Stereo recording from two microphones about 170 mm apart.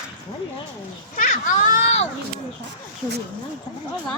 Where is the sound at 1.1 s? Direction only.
50° left (ahead or behind).